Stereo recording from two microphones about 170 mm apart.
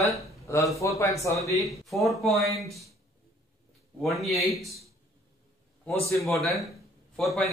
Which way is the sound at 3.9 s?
Centre (ahead or behind).